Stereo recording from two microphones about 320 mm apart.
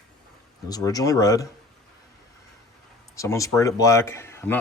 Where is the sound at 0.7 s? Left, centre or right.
Centre.